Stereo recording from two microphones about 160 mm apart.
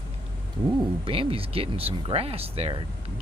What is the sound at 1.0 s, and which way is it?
Speech, 35° right (ahead or behind).